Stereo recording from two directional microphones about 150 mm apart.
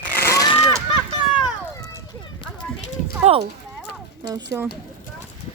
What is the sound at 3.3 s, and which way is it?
Speech, 45° right (ahead or behind).